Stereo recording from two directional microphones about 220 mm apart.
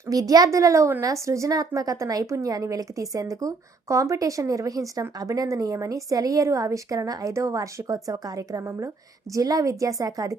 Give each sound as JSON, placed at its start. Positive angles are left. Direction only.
{"t": 0.1, "sound": "a woman's voice", "side_deg": -15}